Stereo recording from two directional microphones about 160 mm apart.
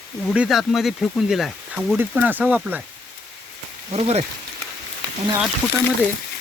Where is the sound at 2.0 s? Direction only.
10° right (ahead or behind).